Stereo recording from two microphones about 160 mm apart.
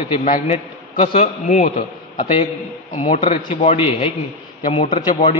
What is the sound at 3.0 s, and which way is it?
Speech, 50° left (ahead or behind).